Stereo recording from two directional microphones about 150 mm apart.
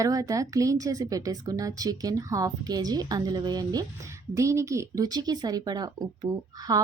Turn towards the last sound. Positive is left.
turn(degrees=-25)  # may be behind; listen again after turning